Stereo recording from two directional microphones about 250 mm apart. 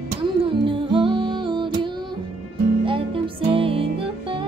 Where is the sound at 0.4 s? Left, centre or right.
Centre.